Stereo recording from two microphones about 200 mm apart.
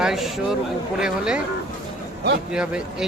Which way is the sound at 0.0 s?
Centre (ahead or behind).